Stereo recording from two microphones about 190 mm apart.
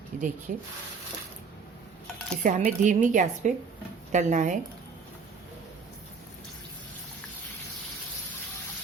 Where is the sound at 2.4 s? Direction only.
40° right (ahead or behind).